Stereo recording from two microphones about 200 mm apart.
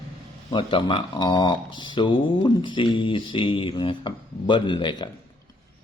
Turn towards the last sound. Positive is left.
turn(degrees=25)  # may be behind; listen again after turning